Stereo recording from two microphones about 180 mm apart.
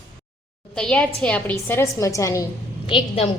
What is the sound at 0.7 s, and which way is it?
A woman's voice, 5° left (ahead or behind).